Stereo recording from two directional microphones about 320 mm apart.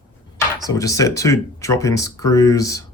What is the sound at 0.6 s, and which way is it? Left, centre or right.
Speech, centre.